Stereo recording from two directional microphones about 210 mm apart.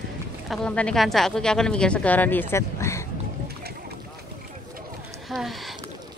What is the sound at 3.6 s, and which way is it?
Boat, 45° right (ahead or behind).